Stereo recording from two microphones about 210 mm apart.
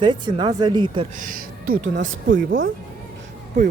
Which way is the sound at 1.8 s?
65° right (ahead or behind).